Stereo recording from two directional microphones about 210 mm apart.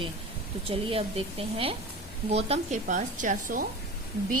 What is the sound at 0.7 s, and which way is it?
A woman's voice, 25° right (ahead or behind).